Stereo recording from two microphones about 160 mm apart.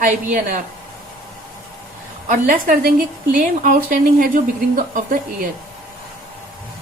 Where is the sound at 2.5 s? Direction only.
60° right (ahead or behind).